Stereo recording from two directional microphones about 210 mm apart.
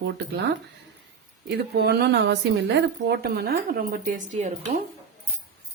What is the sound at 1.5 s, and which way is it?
A woman's voice, 50° right (ahead or behind).